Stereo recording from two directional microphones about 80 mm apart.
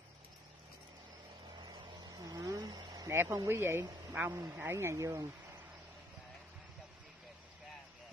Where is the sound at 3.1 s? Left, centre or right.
Right.